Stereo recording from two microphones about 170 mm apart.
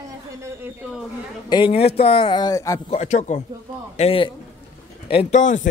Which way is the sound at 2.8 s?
40° left (ahead or behind).